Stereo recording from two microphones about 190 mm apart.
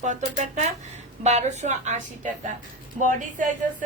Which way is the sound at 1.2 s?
35° right (ahead or behind).